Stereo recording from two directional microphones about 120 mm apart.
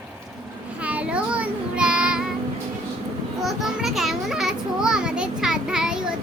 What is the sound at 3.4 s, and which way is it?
Children playing, centre (ahead or behind).